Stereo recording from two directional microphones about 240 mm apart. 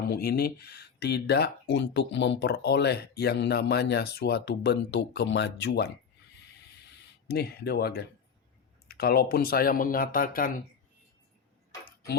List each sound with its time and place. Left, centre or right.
0.1 s speech: left
7.3 s speech: left